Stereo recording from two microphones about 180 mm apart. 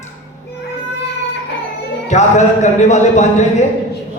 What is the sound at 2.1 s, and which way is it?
Speech, 40° left (ahead or behind).